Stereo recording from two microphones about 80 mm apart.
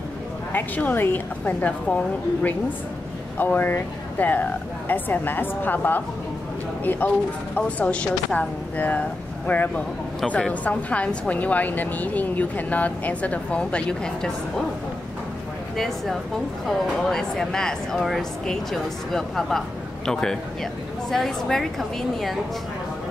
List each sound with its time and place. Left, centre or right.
0.5 s a woman's voice: left
15.7 s speech: centre